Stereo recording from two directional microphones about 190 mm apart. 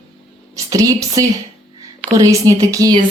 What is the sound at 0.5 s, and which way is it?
A woman's voice, 15° right (ahead or behind).